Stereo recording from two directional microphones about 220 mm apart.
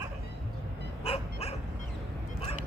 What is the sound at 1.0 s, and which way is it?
Dog, 25° left (ahead or behind).